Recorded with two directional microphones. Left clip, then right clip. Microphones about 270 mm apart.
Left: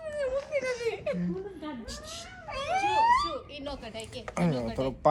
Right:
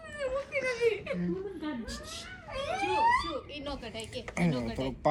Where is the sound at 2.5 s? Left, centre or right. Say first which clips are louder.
Left 4 dB; centre.